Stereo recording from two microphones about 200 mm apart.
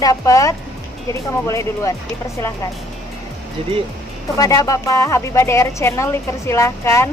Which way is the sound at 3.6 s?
30° right (ahead or behind).